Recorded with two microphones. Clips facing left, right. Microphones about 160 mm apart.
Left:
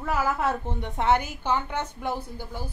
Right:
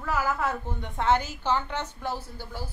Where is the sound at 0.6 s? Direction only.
20° left (ahead or behind).